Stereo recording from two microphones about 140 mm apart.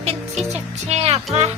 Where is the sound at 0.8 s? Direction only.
50° right (ahead or behind).